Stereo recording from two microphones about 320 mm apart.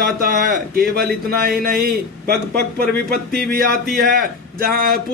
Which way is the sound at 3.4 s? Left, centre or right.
Right.